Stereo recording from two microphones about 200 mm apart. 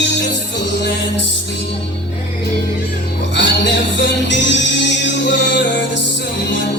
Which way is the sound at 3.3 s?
60° left (ahead or behind).